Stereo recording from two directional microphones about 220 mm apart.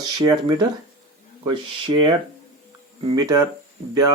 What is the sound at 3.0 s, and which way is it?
Speech, 15° right (ahead or behind).